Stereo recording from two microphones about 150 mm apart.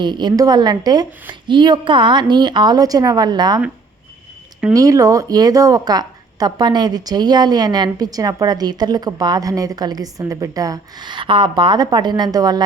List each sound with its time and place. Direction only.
0.0 s a woman's voice: 30° right (ahead or behind)
4.7 s a woman's voice: 25° right (ahead or behind)